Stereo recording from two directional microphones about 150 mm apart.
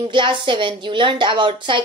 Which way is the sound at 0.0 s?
35° right (ahead or behind).